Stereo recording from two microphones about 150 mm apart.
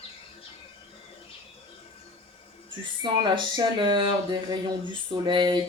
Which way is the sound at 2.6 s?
30° right (ahead or behind).